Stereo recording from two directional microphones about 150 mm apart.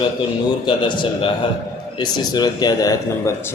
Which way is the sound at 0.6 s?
30° left (ahead or behind).